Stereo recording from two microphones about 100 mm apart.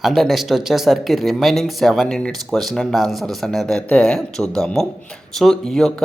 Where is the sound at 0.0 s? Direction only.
Centre (ahead or behind).